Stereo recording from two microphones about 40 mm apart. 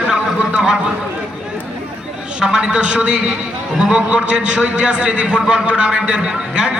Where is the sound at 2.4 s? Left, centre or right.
Centre.